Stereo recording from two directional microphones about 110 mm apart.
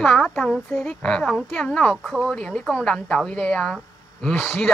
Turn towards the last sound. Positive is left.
turn(degrees=5)  # may be behind; listen again after turning